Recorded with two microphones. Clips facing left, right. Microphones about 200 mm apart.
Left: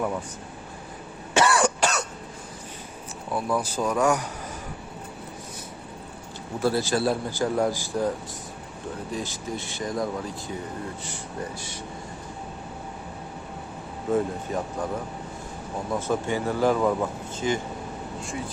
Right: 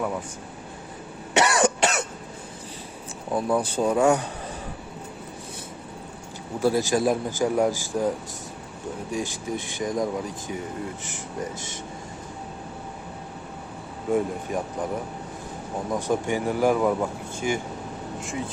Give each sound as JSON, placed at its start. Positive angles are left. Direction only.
{"t": 1.3, "sound": "cough", "side_deg": -20}
{"t": 3.3, "sound": "speech", "side_deg": -30}
{"t": 6.6, "sound": "speech", "side_deg": -15}
{"t": 9.1, "sound": "speech", "side_deg": -15}
{"t": 14.1, "sound": "speech", "side_deg": -15}
{"t": 15.9, "sound": "speech", "side_deg": -15}